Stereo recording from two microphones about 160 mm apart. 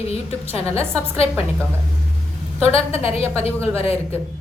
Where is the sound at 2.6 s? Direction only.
40° left (ahead or behind).